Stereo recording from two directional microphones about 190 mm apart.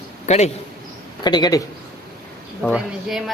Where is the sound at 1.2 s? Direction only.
20° left (ahead or behind).